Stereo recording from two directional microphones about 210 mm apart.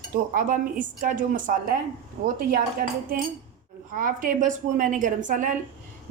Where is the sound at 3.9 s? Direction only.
40° right (ahead or behind).